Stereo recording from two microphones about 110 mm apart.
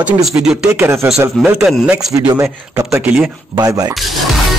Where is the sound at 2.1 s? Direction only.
35° right (ahead or behind).